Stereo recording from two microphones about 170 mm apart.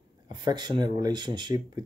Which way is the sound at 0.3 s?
25° right (ahead or behind).